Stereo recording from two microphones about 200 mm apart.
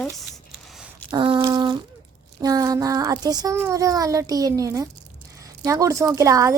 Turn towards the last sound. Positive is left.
turn(degrees=-15)  # may be behind; listen again after turning